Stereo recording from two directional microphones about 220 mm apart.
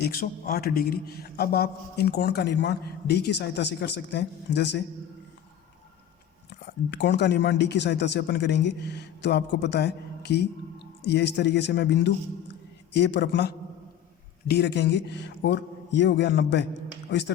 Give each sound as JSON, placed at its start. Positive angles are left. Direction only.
{"t": 0.0, "sound": "a man's voice", "side_deg": 45}
{"t": 6.5, "sound": "a man's voice", "side_deg": 50}